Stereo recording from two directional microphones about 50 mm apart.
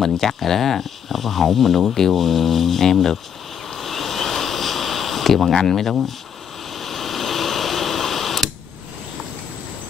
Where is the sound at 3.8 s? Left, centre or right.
Centre.